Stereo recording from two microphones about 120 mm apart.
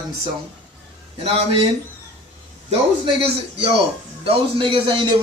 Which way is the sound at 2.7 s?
55° right (ahead or behind).